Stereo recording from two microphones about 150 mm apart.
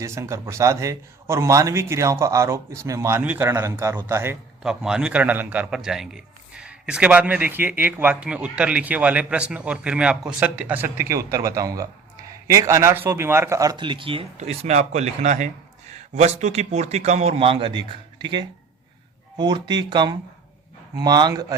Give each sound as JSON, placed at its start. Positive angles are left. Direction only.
{"t": 0.0, "sound": "a man's voice", "side_deg": -20}
{"t": 4.6, "sound": "a man's voice", "side_deg": -5}